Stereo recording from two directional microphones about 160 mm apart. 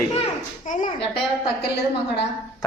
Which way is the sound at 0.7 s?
55° left (ahead or behind).